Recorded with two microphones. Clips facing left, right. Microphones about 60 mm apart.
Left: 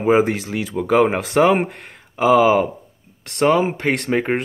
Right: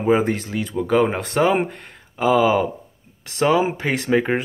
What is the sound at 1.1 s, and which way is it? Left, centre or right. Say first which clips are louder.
Speech: left 4 dB; centre.